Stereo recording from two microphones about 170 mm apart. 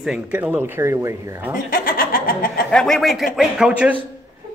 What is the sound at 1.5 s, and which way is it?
Speech, 55° left (ahead or behind).